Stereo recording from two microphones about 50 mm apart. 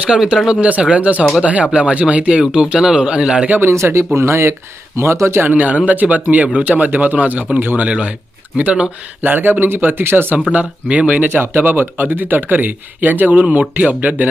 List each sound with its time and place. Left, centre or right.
0.0 s speech: centre
0.7 s speech: right
3.7 s speech: right
5.5 s speech: right
6.7 s speech: right
7.8 s speech: right
9.2 s speech: right
10.5 s speech: right
11.3 s speech: right